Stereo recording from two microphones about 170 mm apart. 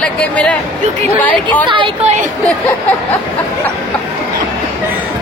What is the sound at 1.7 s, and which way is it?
Speech, 30° right (ahead or behind).